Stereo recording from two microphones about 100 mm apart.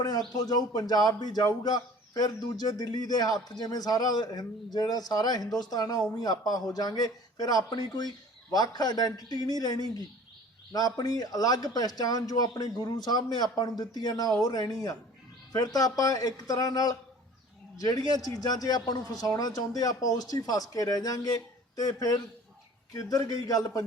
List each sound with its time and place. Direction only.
0.3 s speech: 40° left (ahead or behind)